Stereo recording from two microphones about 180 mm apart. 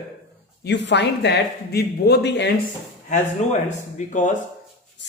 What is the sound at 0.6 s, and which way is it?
A man's voice, 75° left (ahead or behind).